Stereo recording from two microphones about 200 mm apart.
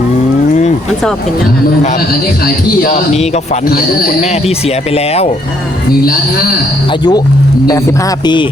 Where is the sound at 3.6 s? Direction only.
45° left (ahead or behind).